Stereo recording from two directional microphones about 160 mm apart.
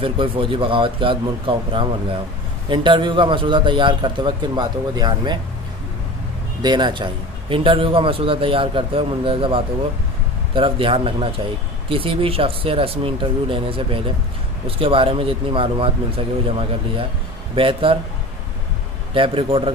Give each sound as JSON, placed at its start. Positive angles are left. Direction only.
{"t": 0.0, "sound": "a man's voice", "side_deg": -35}
{"t": 6.6, "sound": "a man's voice", "side_deg": -30}
{"t": 19.1, "sound": "a man's voice", "side_deg": -35}